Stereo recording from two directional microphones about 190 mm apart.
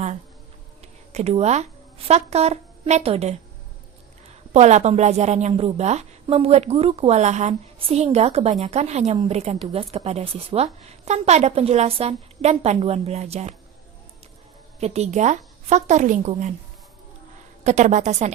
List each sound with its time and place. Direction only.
1.1 s a woman's voice: 35° right (ahead or behind)
4.5 s a woman's voice: 35° right (ahead or behind)
14.8 s a woman's voice: 35° right (ahead or behind)
17.6 s a woman's voice: 35° right (ahead or behind)